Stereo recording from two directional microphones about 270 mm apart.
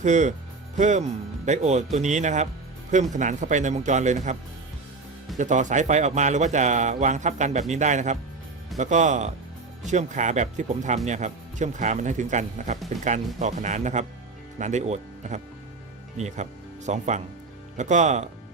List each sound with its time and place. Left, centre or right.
0.0 s speech: right
5.4 s speech: right